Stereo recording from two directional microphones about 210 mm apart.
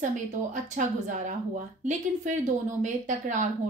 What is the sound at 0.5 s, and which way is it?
A woman's voice, 35° right (ahead or behind).